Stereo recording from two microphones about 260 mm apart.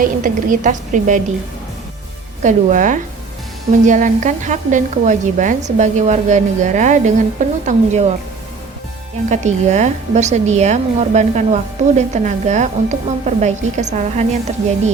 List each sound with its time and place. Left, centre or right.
0.0 s a woman's voice: right
2.4 s a woman's voice: right
9.3 s a woman's voice: right